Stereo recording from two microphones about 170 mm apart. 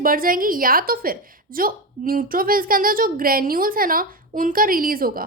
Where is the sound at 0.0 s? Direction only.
55° right (ahead or behind).